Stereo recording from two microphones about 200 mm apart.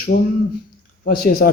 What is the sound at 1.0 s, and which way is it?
Speech, 45° left (ahead or behind).